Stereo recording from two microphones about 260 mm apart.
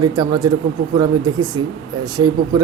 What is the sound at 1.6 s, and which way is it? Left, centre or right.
Speech, right.